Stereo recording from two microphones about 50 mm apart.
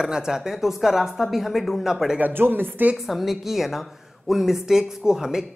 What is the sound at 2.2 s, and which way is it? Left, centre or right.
Speech, right.